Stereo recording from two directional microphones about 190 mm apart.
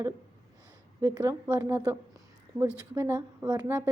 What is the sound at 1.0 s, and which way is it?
A woman's voice, 15° right (ahead or behind).